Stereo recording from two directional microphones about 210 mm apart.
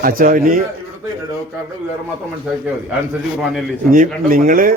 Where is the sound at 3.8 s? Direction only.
40° right (ahead or behind).